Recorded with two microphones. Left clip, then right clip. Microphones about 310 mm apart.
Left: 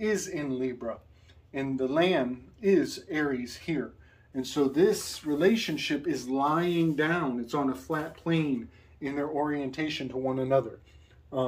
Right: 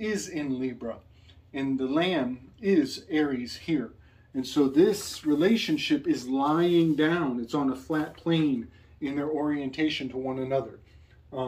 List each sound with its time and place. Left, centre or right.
0.0 s speech: centre